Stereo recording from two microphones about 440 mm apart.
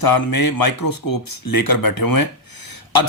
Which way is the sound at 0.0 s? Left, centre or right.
Left.